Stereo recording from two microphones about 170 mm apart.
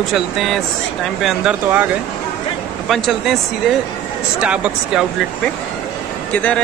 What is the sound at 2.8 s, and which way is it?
Speech, centre (ahead or behind).